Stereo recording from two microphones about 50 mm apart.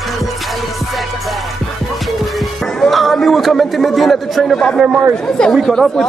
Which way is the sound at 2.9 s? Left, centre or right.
Centre.